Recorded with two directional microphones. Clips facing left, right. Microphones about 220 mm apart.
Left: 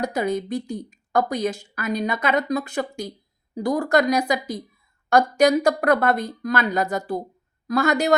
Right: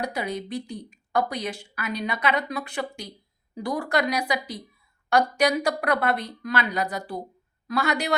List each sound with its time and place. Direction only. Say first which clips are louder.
0.0 s speech: left 6 dB; 45° left (ahead or behind)